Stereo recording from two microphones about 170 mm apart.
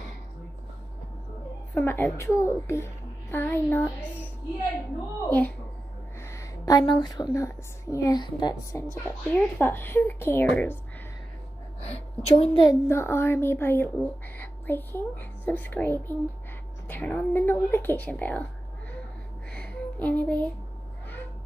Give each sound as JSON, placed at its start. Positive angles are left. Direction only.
{"t": 1.8, "sound": "speech", "side_deg": 10}
{"t": 6.2, "sound": "a woman's voice", "side_deg": 20}
{"t": 8.9, "sound": "speech", "side_deg": 10}
{"t": 11.8, "sound": "a woman's voice", "side_deg": 35}
{"t": 12.8, "sound": "speech", "side_deg": 15}
{"t": 19.5, "sound": "music", "side_deg": 10}